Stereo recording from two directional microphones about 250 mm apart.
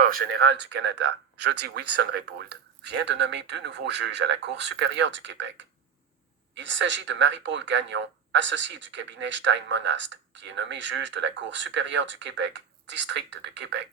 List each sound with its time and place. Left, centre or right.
0.0 s speech: right